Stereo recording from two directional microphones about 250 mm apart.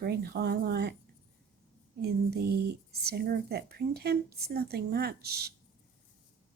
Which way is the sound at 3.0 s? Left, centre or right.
Right.